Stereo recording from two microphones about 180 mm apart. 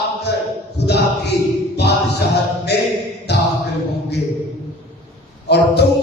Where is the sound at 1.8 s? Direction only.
65° left (ahead or behind).